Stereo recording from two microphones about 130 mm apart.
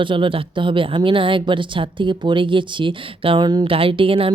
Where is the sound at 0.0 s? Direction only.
40° right (ahead or behind).